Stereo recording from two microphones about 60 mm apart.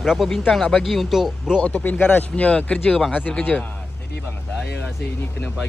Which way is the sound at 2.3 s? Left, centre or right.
Centre.